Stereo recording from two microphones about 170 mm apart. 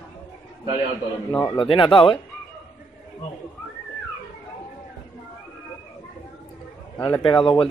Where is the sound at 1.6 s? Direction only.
30° left (ahead or behind).